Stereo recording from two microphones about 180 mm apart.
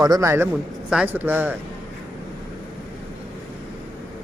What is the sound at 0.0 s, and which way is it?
A man's voice, 20° right (ahead or behind).